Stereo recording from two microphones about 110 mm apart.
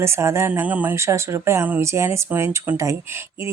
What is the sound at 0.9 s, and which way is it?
Speech, 25° right (ahead or behind).